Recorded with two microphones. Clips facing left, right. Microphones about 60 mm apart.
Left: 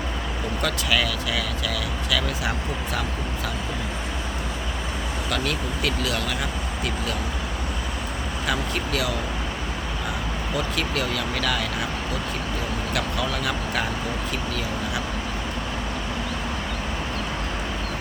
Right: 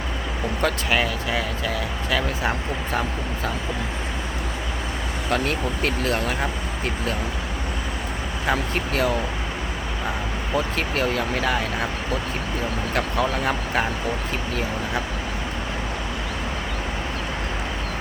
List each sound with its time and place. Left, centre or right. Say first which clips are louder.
0.6 s speech: right 2 dB; right
5.3 s speech: right 4 dB; right
8.4 s speech: right 3 dB; right
10.5 s speech: right 3 dB; right
12.9 s speech: right 4 dB; right